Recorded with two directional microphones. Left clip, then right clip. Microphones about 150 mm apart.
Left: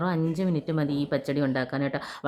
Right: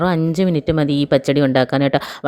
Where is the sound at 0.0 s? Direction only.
50° right (ahead or behind).